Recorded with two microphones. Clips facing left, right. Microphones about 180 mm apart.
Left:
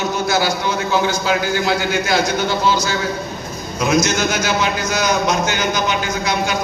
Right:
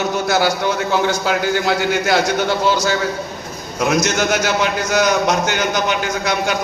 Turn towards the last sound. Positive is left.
turn(degrees=-60)  # may be behind; listen again after turning